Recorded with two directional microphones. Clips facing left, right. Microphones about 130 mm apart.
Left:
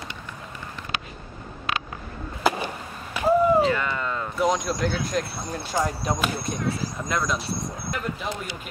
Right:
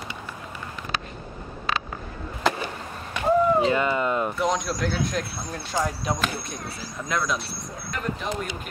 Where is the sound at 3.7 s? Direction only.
20° right (ahead or behind).